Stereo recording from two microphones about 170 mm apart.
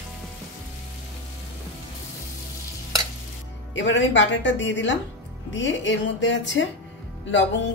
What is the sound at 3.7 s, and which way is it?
Speech, 90° left.